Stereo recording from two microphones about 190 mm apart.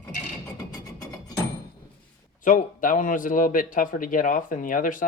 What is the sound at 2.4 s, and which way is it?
A man's voice, 45° left (ahead or behind).